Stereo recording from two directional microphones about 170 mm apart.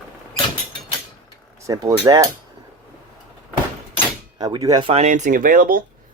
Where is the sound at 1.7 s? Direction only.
25° right (ahead or behind).